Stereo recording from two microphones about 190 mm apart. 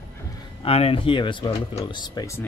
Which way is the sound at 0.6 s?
30° left (ahead or behind).